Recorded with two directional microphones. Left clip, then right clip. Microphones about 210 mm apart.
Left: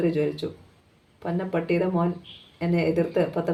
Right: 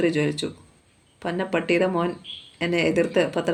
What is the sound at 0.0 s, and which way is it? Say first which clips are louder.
Speech: right 2 dB; 40° right (ahead or behind).